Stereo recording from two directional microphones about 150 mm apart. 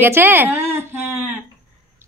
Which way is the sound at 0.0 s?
15° right (ahead or behind).